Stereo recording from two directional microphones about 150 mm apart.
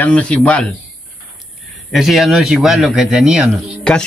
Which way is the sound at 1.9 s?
Centre (ahead or behind).